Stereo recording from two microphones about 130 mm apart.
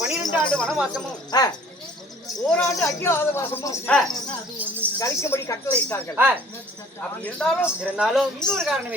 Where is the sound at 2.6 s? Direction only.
20° left (ahead or behind).